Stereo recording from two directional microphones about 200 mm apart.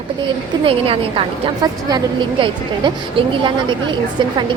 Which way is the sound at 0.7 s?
25° right (ahead or behind).